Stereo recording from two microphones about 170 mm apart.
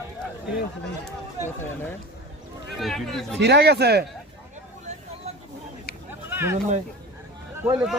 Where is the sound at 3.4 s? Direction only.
75° right (ahead or behind).